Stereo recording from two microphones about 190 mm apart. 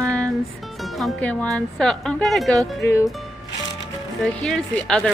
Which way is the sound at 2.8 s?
15° left (ahead or behind).